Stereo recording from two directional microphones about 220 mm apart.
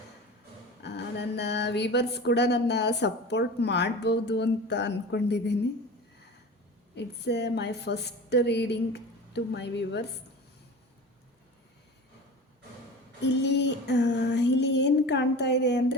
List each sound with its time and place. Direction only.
0.8 s speech: 50° left (ahead or behind)
6.9 s speech: 50° left (ahead or behind)
13.2 s speech: 50° left (ahead or behind)